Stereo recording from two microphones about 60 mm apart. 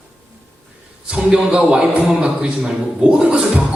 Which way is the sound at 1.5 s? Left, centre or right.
Centre.